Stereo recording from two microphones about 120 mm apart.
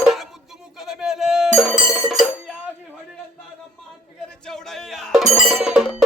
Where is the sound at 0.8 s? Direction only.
5° right (ahead or behind).